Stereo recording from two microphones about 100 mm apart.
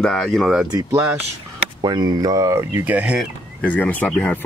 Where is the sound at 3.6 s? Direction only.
15° left (ahead or behind).